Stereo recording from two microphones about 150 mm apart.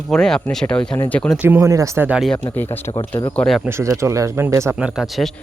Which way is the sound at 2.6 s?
15° left (ahead or behind).